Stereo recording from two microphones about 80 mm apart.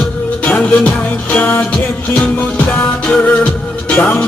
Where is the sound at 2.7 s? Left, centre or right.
Left.